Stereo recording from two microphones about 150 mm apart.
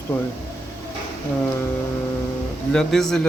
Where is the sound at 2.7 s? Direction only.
5° left (ahead or behind).